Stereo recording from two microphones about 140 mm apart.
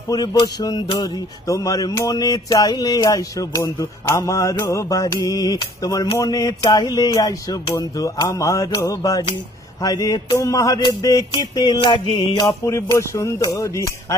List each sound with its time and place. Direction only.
0.1 s music: 30° left (ahead or behind)
12.4 s music: 20° left (ahead or behind)